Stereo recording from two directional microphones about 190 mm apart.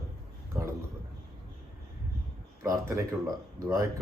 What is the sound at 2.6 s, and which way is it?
Speech, 15° right (ahead or behind).